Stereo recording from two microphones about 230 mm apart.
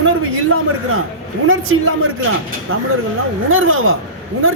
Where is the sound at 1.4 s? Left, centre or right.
Right.